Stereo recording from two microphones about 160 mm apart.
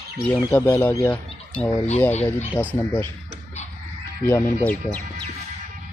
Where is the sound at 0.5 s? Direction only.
15° left (ahead or behind).